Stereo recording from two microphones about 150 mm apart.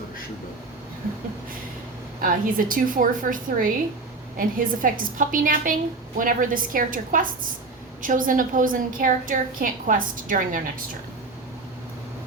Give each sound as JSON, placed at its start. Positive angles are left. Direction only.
{"t": 2.2, "sound": "a woman's voice", "side_deg": -65}